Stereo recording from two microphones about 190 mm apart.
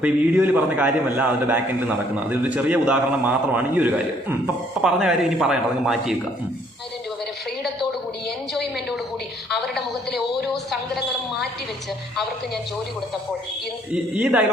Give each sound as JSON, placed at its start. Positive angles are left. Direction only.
{"t": 0.0, "sound": "a man's voice", "side_deg": -5}
{"t": 9.5, "sound": "a sound", "side_deg": 0}
{"t": 13.9, "sound": "speech", "side_deg": -5}